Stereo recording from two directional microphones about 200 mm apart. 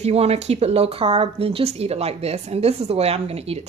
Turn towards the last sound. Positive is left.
turn(degrees=-30)  # may be behind; listen again after turning